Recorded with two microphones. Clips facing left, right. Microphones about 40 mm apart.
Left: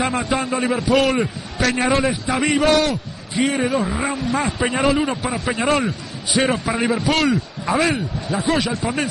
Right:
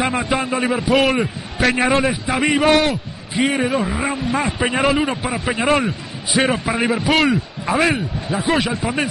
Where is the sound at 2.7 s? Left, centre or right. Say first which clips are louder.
Right 2 dB; right.